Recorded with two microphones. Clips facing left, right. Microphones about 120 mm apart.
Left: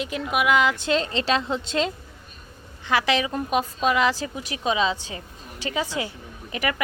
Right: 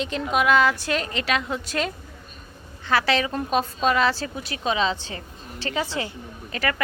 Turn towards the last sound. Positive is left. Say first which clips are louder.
# even
turn(degrees=15)  # may be behind; listen again after turning